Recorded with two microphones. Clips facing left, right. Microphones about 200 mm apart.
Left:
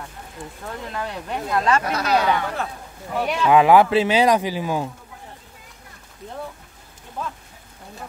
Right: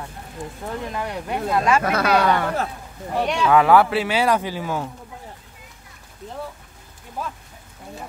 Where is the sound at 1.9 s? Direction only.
55° right (ahead or behind).